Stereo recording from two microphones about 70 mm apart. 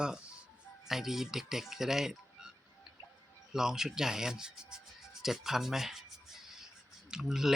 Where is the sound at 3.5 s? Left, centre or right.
Centre.